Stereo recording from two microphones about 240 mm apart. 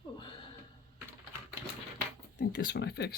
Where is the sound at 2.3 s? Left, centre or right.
Left.